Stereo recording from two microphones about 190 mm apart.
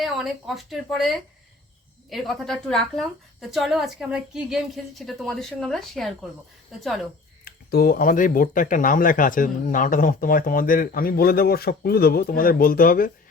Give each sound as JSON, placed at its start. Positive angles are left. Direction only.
{"t": 0.0, "sound": "a woman's voice", "side_deg": 0}
{"t": 7.4, "sound": "speech", "side_deg": 55}